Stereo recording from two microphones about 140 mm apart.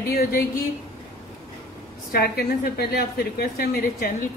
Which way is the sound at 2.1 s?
90° left.